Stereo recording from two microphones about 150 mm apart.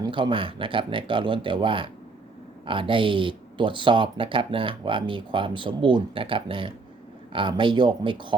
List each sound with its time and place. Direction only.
0.0 s speech: 35° right (ahead or behind)